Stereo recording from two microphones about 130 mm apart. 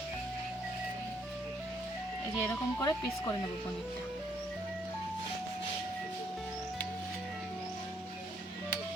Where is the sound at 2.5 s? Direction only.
20° left (ahead or behind).